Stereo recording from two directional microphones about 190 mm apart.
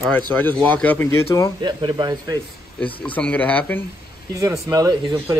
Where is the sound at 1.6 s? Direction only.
25° right (ahead or behind).